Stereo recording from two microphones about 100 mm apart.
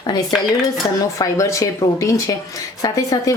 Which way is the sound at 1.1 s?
30° left (ahead or behind).